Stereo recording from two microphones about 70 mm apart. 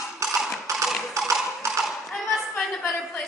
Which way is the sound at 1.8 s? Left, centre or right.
Centre.